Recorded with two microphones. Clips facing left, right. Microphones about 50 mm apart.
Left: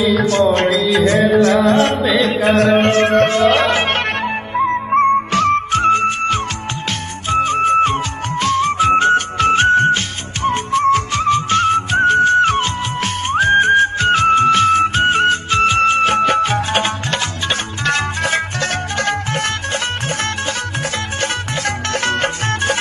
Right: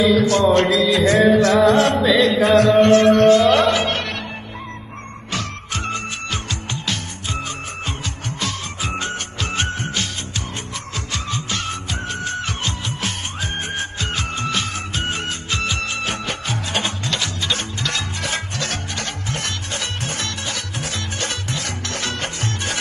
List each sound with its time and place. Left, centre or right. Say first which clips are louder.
0.2 s music: left 1 dB; left
5.8 s music: left 12 dB; left
12.4 s music: left 9 dB; left
13.3 s music: left 15 dB; left
13.6 s music: left 14 dB; left
14.0 s music: left 12 dB; left
21.2 s music: left 7 dB; left